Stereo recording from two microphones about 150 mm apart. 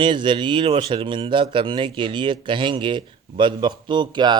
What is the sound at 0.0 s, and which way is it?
Speech, 30° right (ahead or behind).